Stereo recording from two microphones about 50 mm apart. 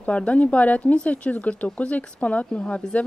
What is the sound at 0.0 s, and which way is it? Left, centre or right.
Speech, left.